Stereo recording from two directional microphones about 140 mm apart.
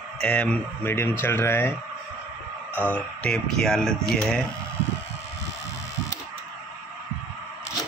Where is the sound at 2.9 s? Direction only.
5° left (ahead or behind).